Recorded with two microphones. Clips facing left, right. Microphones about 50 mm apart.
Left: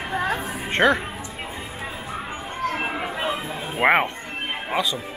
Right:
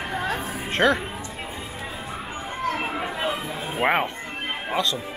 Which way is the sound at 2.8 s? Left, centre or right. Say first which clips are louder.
Left 1 dB; centre.